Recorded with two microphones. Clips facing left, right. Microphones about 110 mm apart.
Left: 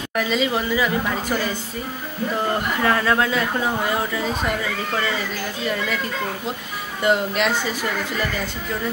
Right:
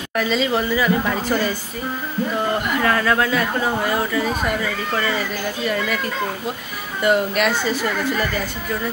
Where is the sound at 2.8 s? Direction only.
20° left (ahead or behind).